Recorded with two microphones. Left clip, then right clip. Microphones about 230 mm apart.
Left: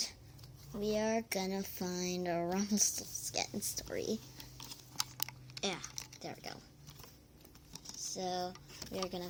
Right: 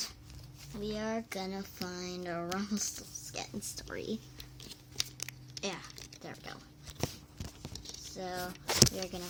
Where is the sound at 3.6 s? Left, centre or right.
Centre.